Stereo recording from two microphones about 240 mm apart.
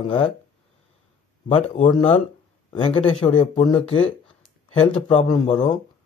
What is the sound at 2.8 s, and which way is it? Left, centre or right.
A man's voice, left.